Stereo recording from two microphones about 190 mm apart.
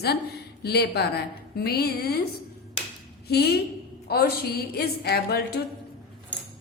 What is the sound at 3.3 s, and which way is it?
A woman's voice, 55° left (ahead or behind).